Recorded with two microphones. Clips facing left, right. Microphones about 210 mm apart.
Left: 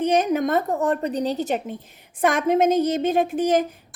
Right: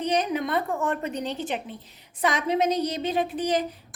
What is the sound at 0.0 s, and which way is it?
A woman's voice, 50° left (ahead or behind).